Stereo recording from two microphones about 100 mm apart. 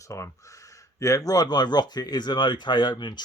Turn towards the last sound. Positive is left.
turn(degrees=45)  # may be behind; listen again after turning